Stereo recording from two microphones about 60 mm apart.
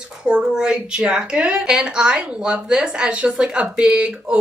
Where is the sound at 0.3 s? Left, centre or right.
Centre.